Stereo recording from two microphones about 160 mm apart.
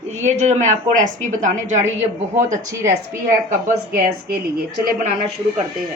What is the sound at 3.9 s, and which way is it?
A woman's voice, 70° right (ahead or behind).